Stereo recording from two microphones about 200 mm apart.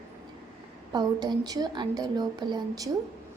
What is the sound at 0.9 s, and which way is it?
A woman's voice, 20° right (ahead or behind).